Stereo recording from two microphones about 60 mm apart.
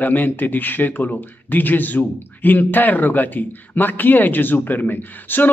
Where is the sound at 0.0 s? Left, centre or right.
Left.